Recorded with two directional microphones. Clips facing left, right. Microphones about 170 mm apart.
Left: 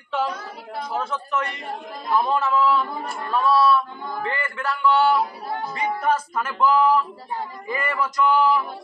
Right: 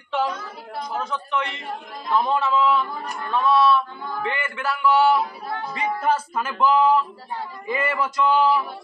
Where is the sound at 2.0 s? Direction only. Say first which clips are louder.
Even; 10° left (ahead or behind).